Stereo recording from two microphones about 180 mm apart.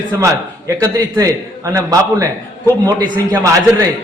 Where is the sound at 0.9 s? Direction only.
15° right (ahead or behind).